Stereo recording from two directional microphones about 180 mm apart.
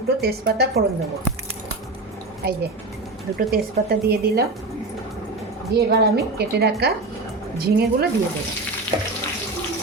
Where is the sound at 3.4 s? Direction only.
60° right (ahead or behind).